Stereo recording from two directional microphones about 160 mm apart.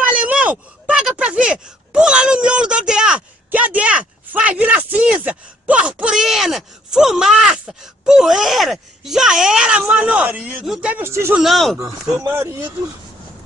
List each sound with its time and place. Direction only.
0.0 s speech: 10° right (ahead or behind)
11.4 s speech: centre (ahead or behind)
12.2 s speech: 15° right (ahead or behind)